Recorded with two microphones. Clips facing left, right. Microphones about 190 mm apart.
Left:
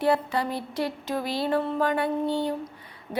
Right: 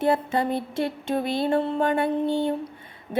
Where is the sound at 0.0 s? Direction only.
25° right (ahead or behind).